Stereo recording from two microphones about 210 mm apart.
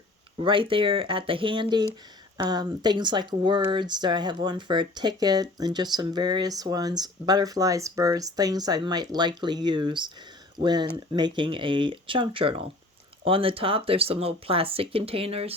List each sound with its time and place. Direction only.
0.3 s speech: 25° right (ahead or behind)